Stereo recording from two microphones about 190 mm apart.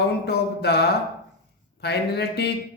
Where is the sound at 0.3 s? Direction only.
60° left (ahead or behind).